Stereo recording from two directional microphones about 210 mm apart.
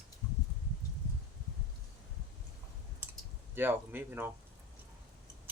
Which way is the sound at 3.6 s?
10° right (ahead or behind).